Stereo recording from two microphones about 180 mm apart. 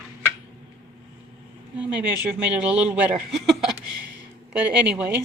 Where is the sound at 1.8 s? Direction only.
10° right (ahead or behind).